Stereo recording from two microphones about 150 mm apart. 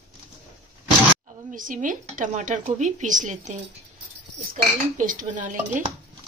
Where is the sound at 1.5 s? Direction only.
60° right (ahead or behind).